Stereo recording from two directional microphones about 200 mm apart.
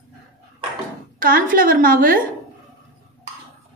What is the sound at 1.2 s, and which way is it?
A woman's voice, 45° right (ahead or behind).